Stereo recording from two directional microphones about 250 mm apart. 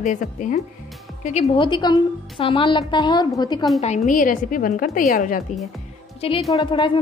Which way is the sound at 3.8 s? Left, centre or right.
Left.